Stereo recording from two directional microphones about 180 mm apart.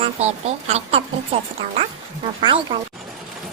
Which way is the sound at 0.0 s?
35° right (ahead or behind).